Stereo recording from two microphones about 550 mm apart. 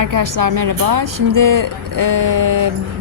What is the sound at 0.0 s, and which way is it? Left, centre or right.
A woman's voice, right.